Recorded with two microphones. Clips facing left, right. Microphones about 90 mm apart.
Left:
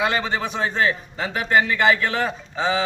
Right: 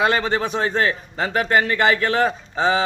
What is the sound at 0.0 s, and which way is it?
A man's voice, 45° right (ahead or behind).